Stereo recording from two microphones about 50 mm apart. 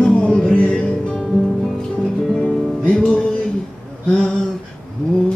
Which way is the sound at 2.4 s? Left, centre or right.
Centre.